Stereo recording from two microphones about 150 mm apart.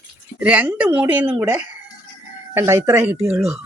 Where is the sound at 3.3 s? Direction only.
5° right (ahead or behind).